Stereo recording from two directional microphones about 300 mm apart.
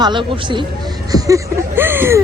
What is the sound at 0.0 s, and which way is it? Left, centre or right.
Speech, centre.